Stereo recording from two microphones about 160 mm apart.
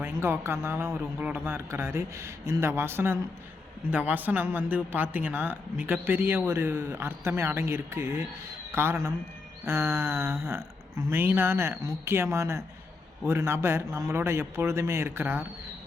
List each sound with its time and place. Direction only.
0.0 s speech: 15° right (ahead or behind)